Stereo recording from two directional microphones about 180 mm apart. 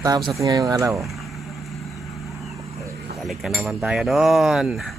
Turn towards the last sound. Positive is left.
turn(degrees=-5)  # may be behind; listen again after turning